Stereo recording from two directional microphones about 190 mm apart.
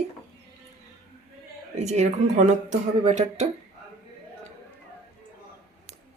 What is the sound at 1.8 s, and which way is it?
Speech, 40° right (ahead or behind).